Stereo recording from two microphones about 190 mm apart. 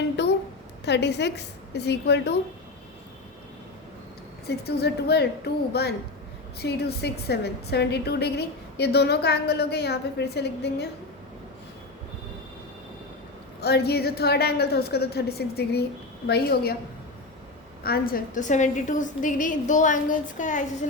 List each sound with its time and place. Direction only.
0.2 s a sound: 65° left (ahead or behind)
0.9 s a woman's voice: 65° left (ahead or behind)
4.4 s a woman's voice: 60° left (ahead or behind)
13.6 s a woman's voice: 60° left (ahead or behind)
17.8 s a woman's voice: 50° left (ahead or behind)